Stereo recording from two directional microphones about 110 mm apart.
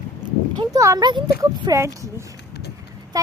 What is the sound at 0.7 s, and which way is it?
A child's voice, 30° right (ahead or behind).